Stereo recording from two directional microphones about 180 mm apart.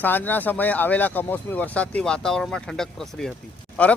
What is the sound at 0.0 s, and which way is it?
Speech, 10° left (ahead or behind).